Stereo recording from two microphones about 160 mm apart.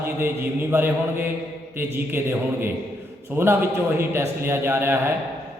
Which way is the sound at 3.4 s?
15° right (ahead or behind).